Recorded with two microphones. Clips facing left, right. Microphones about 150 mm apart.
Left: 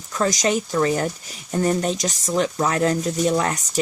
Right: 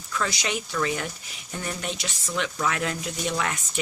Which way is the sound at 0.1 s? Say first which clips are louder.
Left 8 dB; 40° left (ahead or behind).